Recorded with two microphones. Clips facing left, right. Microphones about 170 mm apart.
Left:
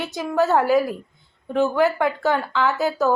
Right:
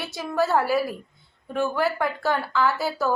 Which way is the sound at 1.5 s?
15° left (ahead or behind).